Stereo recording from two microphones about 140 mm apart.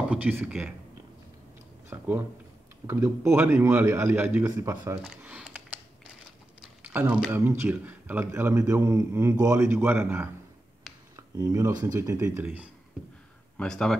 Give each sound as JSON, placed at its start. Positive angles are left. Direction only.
{"t": 0.1, "sound": "a man's voice", "side_deg": -10}
{"t": 1.9, "sound": "a man's voice", "side_deg": -20}
{"t": 6.6, "sound": "a sound", "side_deg": -10}
{"t": 7.2, "sound": "a man's voice", "side_deg": -15}
{"t": 12.4, "sound": "a man's voice", "side_deg": -10}
{"t": 13.6, "sound": "speech", "side_deg": 5}